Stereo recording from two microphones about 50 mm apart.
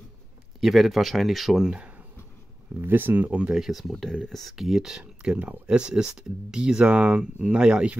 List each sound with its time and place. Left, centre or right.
0.6 s speech: centre
1.6 s speech: centre
2.8 s speech: right
3.5 s speech: centre
4.1 s speech: centre